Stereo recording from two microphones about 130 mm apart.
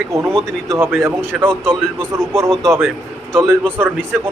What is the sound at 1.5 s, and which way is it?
Speech, 5° left (ahead or behind).